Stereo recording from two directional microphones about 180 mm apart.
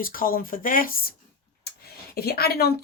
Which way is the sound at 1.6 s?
60° left (ahead or behind).